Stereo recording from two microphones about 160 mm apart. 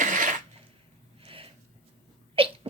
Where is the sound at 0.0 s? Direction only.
55° right (ahead or behind).